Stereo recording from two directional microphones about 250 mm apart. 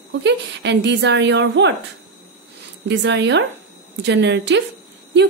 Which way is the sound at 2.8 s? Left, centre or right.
Right.